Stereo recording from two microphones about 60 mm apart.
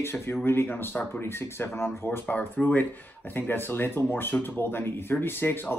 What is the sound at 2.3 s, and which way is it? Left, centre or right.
Speech, left.